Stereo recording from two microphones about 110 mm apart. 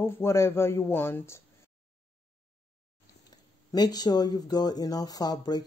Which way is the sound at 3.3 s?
35° left (ahead or behind).